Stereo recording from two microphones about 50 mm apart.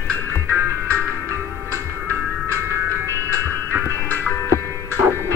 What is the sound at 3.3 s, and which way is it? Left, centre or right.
Music, right.